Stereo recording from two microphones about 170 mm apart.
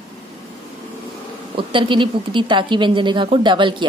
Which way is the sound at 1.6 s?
30° right (ahead or behind).